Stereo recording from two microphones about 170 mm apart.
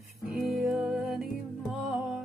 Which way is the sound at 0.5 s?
Centre (ahead or behind).